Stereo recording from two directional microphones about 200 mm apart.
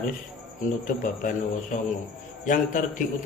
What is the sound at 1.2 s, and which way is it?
A man's voice, 40° left (ahead or behind).